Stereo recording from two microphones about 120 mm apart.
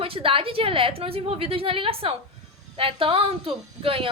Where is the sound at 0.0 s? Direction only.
50° right (ahead or behind).